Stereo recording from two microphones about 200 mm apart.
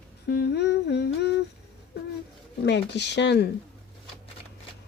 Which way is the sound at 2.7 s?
60° left (ahead or behind).